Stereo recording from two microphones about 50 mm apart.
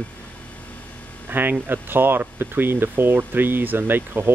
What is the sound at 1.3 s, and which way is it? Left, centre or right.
Speech, right.